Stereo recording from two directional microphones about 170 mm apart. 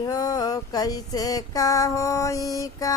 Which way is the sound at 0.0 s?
20° left (ahead or behind).